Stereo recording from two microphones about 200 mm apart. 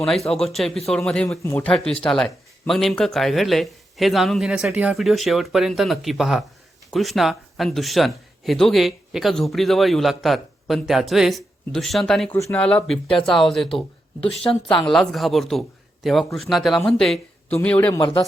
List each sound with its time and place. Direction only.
0.3 s speech: centre (ahead or behind)
13.7 s speech: 30° left (ahead or behind)
14.8 s speech: centre (ahead or behind); by 18.3 s 20° left (ahead or behind)